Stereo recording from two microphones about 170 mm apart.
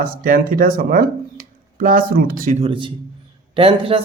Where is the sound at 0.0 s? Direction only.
55° right (ahead or behind).